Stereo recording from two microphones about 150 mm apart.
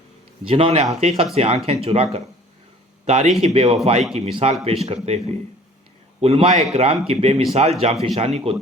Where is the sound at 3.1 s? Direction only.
50° right (ahead or behind).